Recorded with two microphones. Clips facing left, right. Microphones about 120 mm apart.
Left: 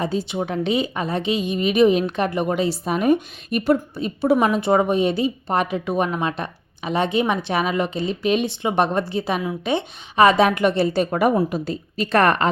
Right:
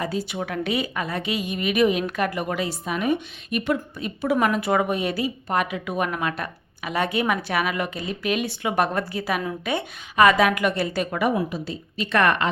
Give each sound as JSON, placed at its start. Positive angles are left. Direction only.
{"t": 0.0, "sound": "a woman's voice", "side_deg": 25}